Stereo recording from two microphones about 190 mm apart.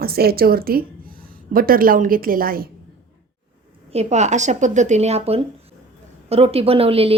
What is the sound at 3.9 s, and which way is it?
A woman's voice, 35° right (ahead or behind).